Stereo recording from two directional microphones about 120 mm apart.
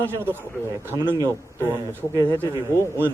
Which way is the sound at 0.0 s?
20° right (ahead or behind).